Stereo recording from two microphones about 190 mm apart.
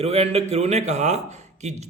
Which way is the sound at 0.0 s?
30° right (ahead or behind).